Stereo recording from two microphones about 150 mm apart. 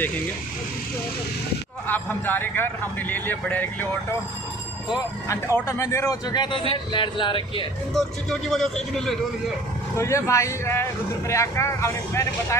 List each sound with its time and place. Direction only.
1.9 s a man's voice: 10° left (ahead or behind)
5.7 s a man's voice: 20° left (ahead or behind); by 7.6 s 35° left (ahead or behind)
7.9 s speech: 5° left (ahead or behind)
9.9 s speech: 20° left (ahead or behind)